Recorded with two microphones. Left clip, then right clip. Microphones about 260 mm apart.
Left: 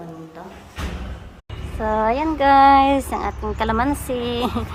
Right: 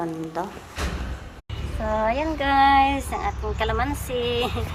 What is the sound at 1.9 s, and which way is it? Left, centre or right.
Speech, left.